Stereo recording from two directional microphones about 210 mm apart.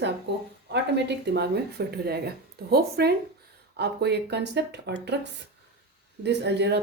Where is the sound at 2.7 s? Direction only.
50° right (ahead or behind).